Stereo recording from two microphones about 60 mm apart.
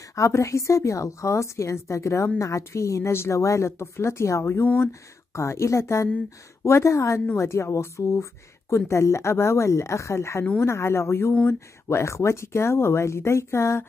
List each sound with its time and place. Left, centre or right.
0.1 s a woman's voice: left